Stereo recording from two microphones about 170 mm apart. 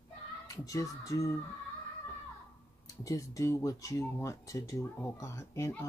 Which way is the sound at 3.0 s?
20° left (ahead or behind).